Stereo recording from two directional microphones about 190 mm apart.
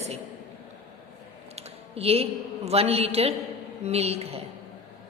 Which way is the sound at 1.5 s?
30° right (ahead or behind).